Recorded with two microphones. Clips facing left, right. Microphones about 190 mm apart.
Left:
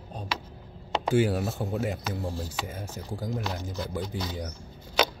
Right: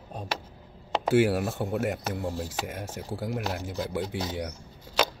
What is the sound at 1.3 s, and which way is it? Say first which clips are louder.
Speech: right 2 dB; 10° right (ahead or behind).